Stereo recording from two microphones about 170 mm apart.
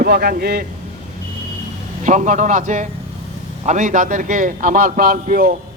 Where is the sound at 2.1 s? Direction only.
45° right (ahead or behind).